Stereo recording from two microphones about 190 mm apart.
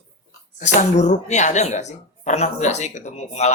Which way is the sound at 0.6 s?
40° left (ahead or behind).